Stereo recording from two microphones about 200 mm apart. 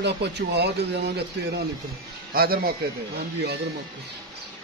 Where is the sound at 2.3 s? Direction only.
45° right (ahead or behind).